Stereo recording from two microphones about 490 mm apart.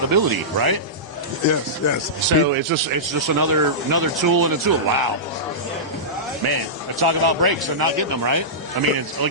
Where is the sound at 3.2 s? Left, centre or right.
Right.